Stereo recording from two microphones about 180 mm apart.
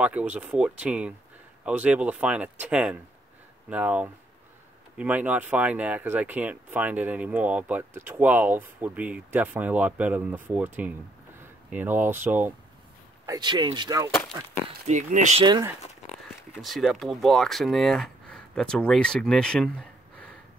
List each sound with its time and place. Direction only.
0.0 s speech: 5° right (ahead or behind)
13.2 s speech: 20° right (ahead or behind)
14.9 s speech: 40° right (ahead or behind)
15.4 s speech: 25° right (ahead or behind)
16.6 s speech: centre (ahead or behind)